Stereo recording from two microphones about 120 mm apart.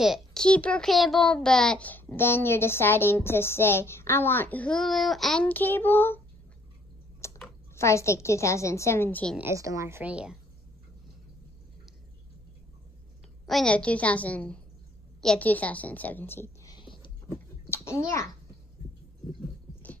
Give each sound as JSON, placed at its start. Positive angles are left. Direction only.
{"t": 0.0, "sound": "a child's voice", "side_deg": 0}
{"t": 7.2, "sound": "typing", "side_deg": 25}
{"t": 7.7, "sound": "a woman's voice", "side_deg": 25}
{"t": 9.4, "sound": "speech", "side_deg": -25}
{"t": 10.0, "sound": "a woman's voice", "side_deg": -10}
{"t": 13.5, "sound": "a child's voice", "side_deg": 5}
{"t": 16.6, "sound": "a sound", "side_deg": 40}
{"t": 17.6, "sound": "a child's voice", "side_deg": 20}